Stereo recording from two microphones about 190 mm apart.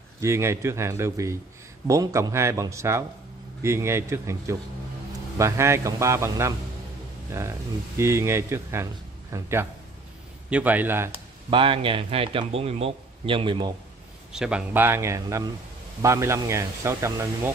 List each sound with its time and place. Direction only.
0.2 s speech: 15° right (ahead or behind)
11.5 s speech: 25° right (ahead or behind)
14.3 s speech: 5° right (ahead or behind)